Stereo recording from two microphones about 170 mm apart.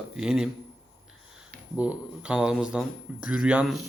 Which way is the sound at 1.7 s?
5° right (ahead or behind).